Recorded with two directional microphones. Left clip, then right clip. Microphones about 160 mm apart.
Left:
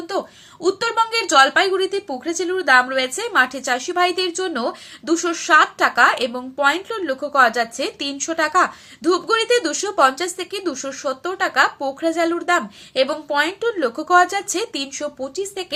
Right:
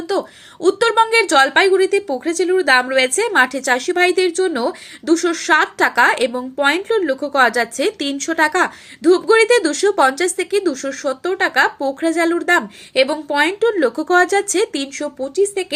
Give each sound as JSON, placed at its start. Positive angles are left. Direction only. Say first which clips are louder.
{"t": 0.6, "sound": "a woman's voice", "louder": "right 5 dB", "side_deg": -40}
{"t": 1.1, "sound": "speech", "louder": "right 2 dB", "side_deg": -25}